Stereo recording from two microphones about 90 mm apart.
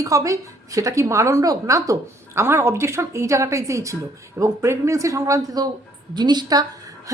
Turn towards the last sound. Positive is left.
turn(degrees=-40)  # may be behind; listen again after turning